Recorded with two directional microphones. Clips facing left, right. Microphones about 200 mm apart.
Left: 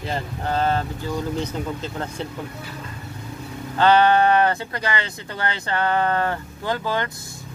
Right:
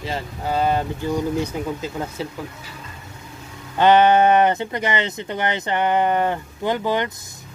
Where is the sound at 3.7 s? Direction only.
20° right (ahead or behind).